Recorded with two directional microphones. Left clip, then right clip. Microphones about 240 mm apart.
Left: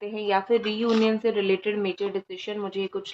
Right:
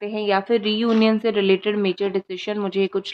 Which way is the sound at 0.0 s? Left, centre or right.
Right.